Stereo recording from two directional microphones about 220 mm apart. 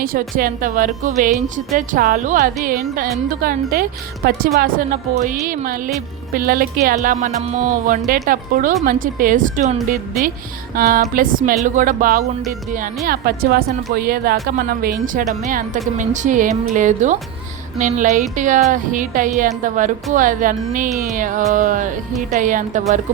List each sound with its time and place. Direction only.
0.0 s a woman's voice: 40° right (ahead or behind)
10.8 s a woman's voice: 40° right (ahead or behind)